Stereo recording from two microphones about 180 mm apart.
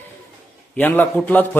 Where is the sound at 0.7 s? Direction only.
10° left (ahead or behind).